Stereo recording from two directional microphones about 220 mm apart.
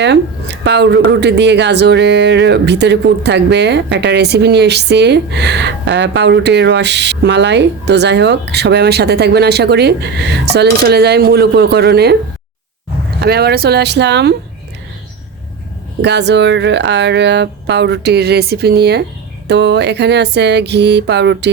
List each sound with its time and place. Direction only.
0.0 s speech: 50° right (ahead or behind)
13.2 s speech: 45° right (ahead or behind)
16.0 s speech: 50° right (ahead or behind)